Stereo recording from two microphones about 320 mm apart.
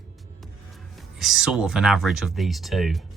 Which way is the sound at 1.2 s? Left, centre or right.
Centre.